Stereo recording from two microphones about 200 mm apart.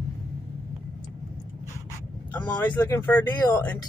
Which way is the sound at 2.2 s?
10° left (ahead or behind).